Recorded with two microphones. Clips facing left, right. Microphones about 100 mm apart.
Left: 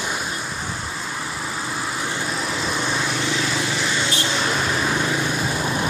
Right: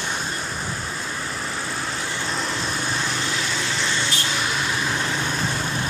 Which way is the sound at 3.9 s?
20° left (ahead or behind).